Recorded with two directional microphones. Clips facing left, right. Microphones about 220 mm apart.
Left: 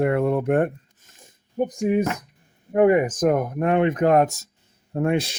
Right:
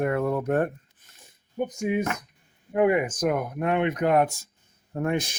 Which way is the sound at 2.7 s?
40° left (ahead or behind).